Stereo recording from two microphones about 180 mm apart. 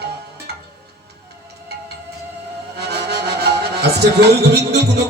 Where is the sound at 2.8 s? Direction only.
65° right (ahead or behind).